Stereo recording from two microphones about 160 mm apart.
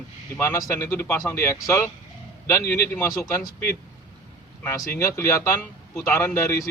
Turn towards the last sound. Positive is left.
turn(degrees=15)  # may be behind; listen again after turning